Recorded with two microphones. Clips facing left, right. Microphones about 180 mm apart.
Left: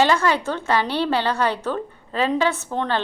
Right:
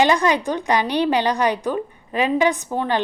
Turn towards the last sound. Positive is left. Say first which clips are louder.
# right 2 dB
turn(degrees=-10)  # may be behind; listen again after turning